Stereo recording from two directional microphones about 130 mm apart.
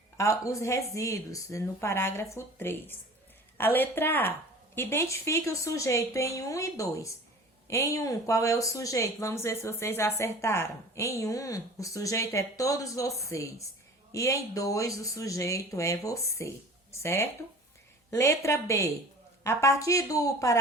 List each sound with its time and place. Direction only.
0.2 s a woman's voice: 25° left (ahead or behind)